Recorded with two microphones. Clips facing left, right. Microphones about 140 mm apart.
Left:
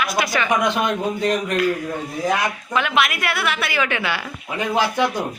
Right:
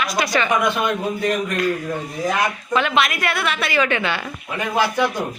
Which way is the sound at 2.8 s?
5° left (ahead or behind).